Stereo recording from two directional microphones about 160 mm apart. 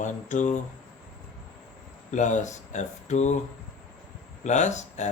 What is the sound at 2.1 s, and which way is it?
Speech, 50° left (ahead or behind).